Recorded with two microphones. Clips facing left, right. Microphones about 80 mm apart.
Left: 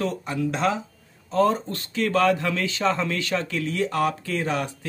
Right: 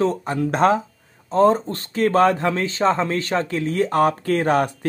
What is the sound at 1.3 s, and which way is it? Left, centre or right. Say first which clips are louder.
Speech: right 5 dB; right.